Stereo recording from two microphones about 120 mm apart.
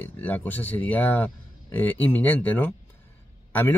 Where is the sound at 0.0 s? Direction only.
15° left (ahead or behind).